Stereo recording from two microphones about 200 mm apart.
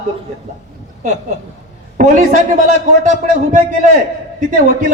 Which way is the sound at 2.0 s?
40° right (ahead or behind).